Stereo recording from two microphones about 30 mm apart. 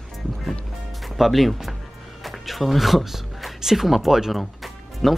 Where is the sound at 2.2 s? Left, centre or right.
Centre.